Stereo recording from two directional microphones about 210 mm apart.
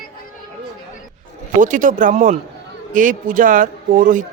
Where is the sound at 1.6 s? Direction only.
40° right (ahead or behind).